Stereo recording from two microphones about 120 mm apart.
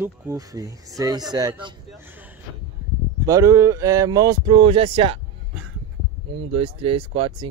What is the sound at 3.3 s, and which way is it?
Speech, 25° right (ahead or behind).